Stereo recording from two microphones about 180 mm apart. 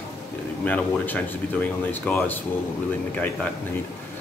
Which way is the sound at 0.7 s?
10° left (ahead or behind).